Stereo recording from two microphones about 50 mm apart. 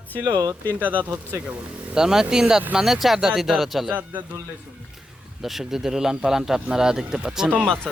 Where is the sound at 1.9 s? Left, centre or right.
Centre.